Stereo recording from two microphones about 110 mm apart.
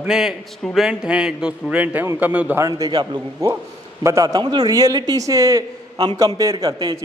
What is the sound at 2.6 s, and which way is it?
A man's voice, 35° right (ahead or behind).